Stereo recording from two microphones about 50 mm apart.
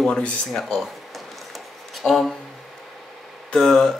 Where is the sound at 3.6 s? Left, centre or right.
Centre.